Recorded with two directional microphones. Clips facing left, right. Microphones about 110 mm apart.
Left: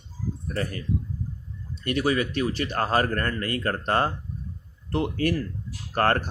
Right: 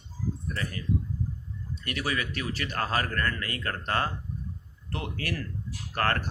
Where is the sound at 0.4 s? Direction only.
45° left (ahead or behind).